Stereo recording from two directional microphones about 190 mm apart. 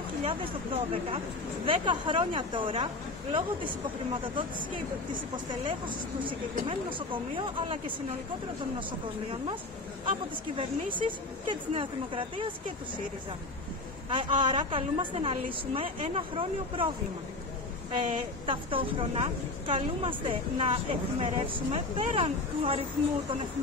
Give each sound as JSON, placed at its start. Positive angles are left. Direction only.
{"t": 0.2, "sound": "a woman's voice", "side_deg": -30}
{"t": 10.0, "sound": "a woman's voice", "side_deg": -25}
{"t": 14.0, "sound": "a woman's voice", "side_deg": -25}
{"t": 18.4, "sound": "a woman's voice", "side_deg": -25}